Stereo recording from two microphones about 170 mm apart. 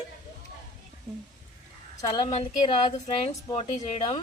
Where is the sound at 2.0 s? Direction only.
25° left (ahead or behind).